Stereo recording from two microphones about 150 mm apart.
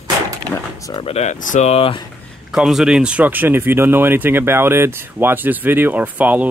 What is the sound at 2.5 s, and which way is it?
Speech, centre (ahead or behind).